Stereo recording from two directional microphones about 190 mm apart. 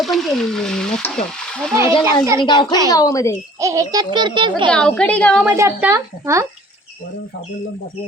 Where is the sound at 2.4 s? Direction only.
25° left (ahead or behind).